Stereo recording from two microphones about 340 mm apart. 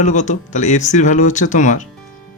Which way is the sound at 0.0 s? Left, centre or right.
Left.